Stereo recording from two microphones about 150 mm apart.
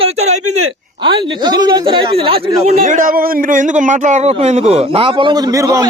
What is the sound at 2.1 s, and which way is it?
Speech, 40° right (ahead or behind).